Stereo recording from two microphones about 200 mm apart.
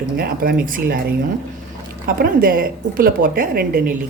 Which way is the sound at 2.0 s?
45° right (ahead or behind).